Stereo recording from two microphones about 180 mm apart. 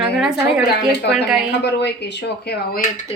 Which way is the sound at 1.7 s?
70° left (ahead or behind).